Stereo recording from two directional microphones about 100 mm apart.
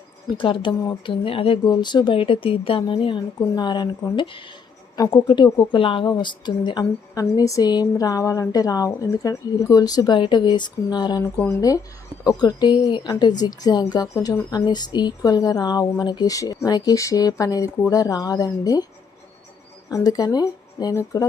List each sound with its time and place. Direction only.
0.3 s speech: 55° left (ahead or behind)
1.6 s speech: 45° left (ahead or behind)
10.2 s speech: 50° left (ahead or behind)
12.2 s speech: 40° left (ahead or behind)
19.9 s speech: 40° left (ahead or behind)